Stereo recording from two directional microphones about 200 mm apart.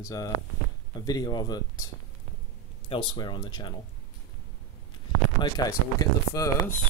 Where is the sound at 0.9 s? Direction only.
20° left (ahead or behind).